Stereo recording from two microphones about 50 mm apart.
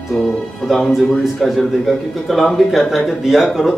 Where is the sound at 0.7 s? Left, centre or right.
Centre.